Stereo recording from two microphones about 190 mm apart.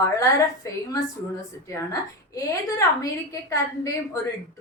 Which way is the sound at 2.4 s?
15° left (ahead or behind).